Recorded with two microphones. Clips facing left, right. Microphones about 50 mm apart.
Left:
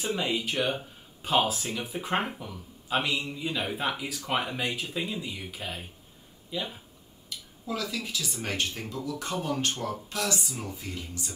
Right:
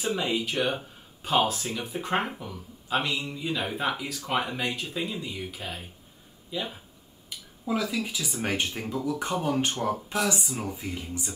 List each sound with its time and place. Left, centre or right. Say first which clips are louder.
0.0 s speech: right 1 dB; centre
7.2 s speech: right 4 dB; centre